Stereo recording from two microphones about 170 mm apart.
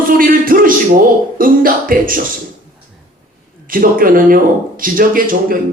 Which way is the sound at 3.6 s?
55° right (ahead or behind).